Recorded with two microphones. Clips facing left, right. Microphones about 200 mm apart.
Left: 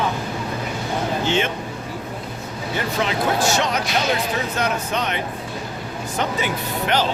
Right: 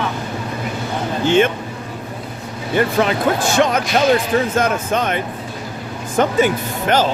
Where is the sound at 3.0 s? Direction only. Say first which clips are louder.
Right 3 dB; 50° right (ahead or behind).